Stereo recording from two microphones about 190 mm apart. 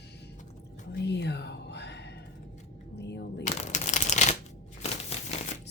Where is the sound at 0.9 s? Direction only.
65° left (ahead or behind).